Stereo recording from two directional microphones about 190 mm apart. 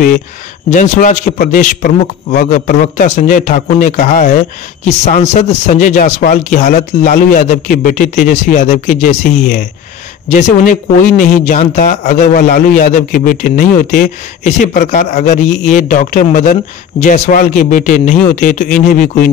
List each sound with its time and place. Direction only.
0.7 s speech: 40° left (ahead or behind)